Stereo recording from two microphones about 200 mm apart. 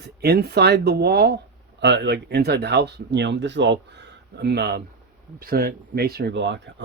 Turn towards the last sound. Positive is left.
turn(degrees=-65)  # may be behind; listen again after turning